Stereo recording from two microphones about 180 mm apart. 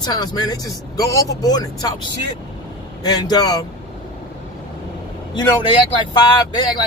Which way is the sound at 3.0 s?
20° left (ahead or behind).